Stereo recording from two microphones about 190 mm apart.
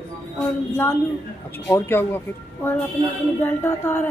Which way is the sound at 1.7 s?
10° left (ahead or behind).